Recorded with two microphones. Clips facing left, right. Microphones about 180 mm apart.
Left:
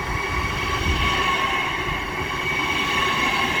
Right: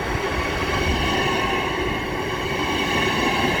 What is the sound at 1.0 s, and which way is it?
Train, 40° right (ahead or behind).